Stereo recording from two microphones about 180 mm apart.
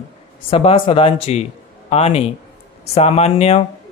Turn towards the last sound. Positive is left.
turn(degrees=35)  # may be behind; listen again after turning